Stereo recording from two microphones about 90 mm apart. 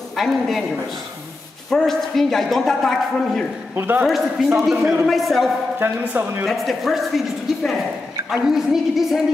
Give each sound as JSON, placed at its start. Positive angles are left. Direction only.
{"t": 0.1, "sound": "a man's voice", "side_deg": 0}
{"t": 1.7, "sound": "a woman's voice", "side_deg": 5}
{"t": 3.7, "sound": "speech", "side_deg": -20}
{"t": 4.6, "sound": "a woman's voice", "side_deg": -5}
{"t": 5.8, "sound": "speech", "side_deg": -25}
{"t": 6.4, "sound": "a woman's voice", "side_deg": 0}